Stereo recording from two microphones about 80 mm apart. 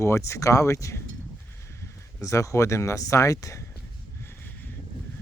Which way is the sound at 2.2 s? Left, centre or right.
Left.